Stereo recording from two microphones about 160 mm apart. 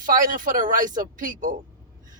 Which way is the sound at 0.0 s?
60° right (ahead or behind).